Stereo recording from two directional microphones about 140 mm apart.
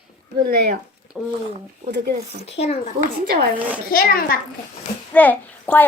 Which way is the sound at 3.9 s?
90° left.